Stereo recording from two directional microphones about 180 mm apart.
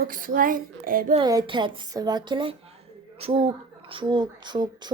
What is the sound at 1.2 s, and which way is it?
A woman's voice, 25° right (ahead or behind).